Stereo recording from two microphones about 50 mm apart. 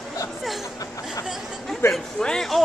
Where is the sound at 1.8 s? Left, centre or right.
Left.